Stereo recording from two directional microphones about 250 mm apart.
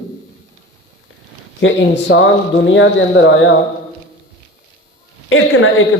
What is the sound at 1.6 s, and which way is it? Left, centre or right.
A man's voice, left.